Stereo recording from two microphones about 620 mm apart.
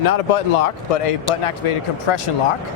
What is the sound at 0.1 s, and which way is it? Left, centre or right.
Speech, left.